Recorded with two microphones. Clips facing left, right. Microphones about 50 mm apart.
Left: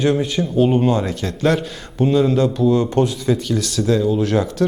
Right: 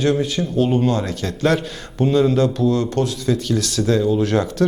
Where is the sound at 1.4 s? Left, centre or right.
Centre.